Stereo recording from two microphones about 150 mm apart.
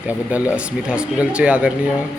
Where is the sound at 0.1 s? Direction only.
10° right (ahead or behind).